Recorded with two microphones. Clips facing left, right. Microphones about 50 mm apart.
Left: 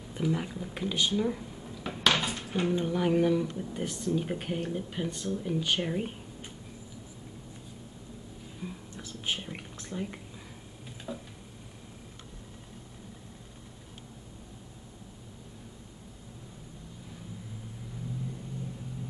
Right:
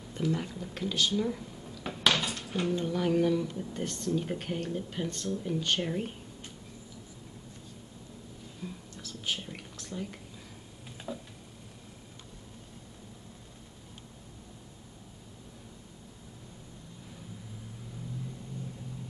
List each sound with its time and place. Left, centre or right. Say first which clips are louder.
0.1 s speech: left 1 dB; centre
8.5 s whispering: left 2 dB; centre
11.1 s a sound: even; centre